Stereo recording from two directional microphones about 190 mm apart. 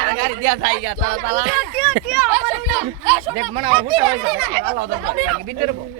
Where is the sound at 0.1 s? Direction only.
50° right (ahead or behind).